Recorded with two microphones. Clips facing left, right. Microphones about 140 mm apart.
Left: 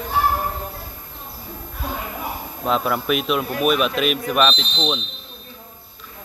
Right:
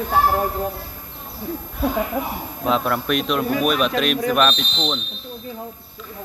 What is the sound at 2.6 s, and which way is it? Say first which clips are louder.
Speech: even; centre (ahead or behind).